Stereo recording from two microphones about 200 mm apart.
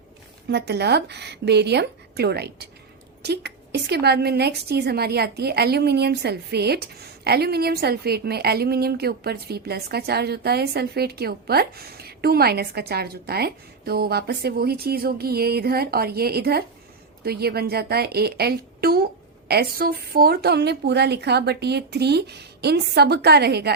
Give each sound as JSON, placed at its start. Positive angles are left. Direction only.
{"t": 0.4, "sound": "a woman's voice", "side_deg": -55}